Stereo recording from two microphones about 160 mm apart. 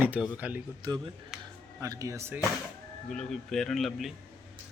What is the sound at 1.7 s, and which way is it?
Speech, 20° right (ahead or behind).